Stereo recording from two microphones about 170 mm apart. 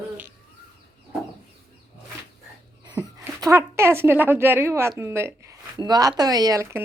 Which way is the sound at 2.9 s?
20° right (ahead or behind).